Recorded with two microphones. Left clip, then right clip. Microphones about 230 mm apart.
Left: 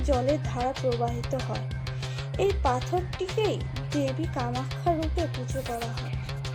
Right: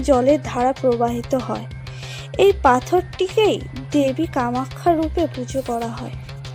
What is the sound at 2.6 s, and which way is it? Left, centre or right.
Speech, right.